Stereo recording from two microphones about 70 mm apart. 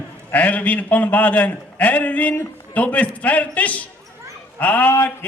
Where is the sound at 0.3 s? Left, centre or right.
Left.